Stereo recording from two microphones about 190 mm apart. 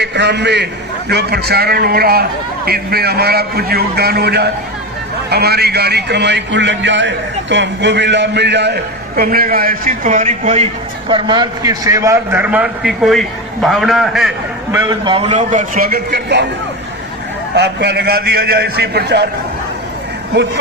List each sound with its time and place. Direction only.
0.0 s a man's voice: 65° right (ahead or behind); by 10.7 s 35° right (ahead or behind)
11.1 s a man's voice: 25° right (ahead or behind); by 14.3 s centre (ahead or behind)
14.8 s a man's voice: 25° right (ahead or behind)
15.3 s a man's voice: 40° right (ahead or behind); by 16.5 s 60° right (ahead or behind)
17.5 s a man's voice: 60° right (ahead or behind)
20.3 s a man's voice: 60° right (ahead or behind)